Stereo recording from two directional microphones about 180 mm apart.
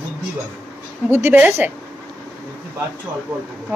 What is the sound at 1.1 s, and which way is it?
Speech, 10° right (ahead or behind).